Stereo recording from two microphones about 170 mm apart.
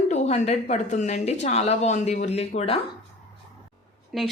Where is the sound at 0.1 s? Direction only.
40° left (ahead or behind).